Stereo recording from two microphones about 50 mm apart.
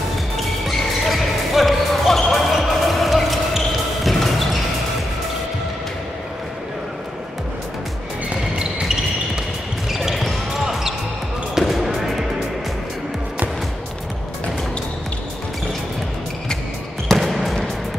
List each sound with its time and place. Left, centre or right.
0.7 s basketball bounce: centre
8.3 s music: right
9.8 s basketball bounce: centre
17.2 s basketball bounce: centre